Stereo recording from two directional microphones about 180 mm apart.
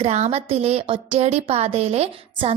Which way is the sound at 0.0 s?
35° right (ahead or behind).